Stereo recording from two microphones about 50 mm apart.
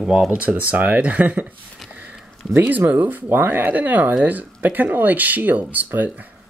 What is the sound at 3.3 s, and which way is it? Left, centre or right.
Speech, right.